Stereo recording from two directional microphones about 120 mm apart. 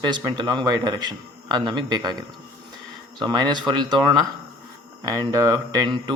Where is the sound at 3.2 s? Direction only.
40° right (ahead or behind).